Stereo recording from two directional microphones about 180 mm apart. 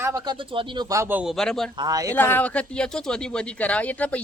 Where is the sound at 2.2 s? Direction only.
10° left (ahead or behind).